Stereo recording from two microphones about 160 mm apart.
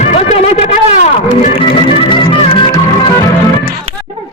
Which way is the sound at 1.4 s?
35° left (ahead or behind).